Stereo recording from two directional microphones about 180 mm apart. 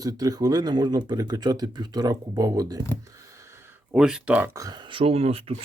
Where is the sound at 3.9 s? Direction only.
5° right (ahead or behind); by 5.6 s 30° right (ahead or behind).